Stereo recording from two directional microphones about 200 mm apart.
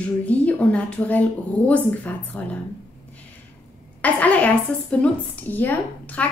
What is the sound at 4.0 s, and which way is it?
A woman's voice, 5° left (ahead or behind).